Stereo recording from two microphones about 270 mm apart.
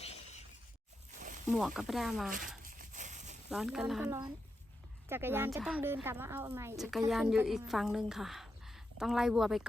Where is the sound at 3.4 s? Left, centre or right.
Centre.